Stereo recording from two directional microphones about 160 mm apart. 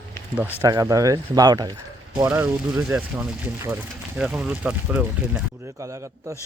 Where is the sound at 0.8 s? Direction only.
20° right (ahead or behind).